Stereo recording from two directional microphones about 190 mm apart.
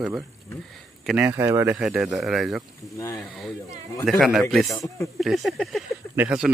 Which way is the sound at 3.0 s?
15° left (ahead or behind).